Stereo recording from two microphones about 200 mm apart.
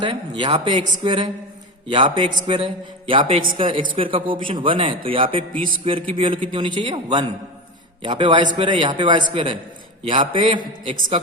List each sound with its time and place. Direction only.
0.0 s speech: 25° right (ahead or behind)
5.5 s speech: 45° right (ahead or behind)
5.8 s speech: 25° right (ahead or behind)